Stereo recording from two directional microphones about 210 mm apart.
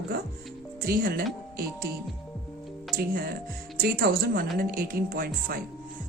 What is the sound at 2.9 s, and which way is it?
Speech, 45° right (ahead or behind).